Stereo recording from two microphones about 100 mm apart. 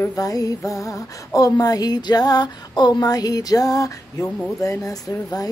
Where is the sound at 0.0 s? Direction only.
35° left (ahead or behind).